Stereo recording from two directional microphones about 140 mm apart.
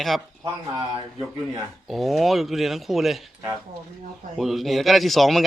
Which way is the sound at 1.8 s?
Centre (ahead or behind).